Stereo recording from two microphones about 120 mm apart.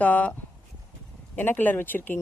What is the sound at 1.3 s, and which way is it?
Speech, 15° left (ahead or behind).